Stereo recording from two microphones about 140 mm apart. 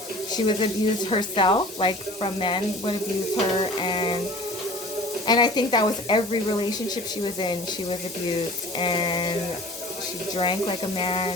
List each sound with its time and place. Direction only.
0.3 s speech: 35° left (ahead or behind)
5.2 s speech: 30° left (ahead or behind)
10.3 s speech: 35° left (ahead or behind)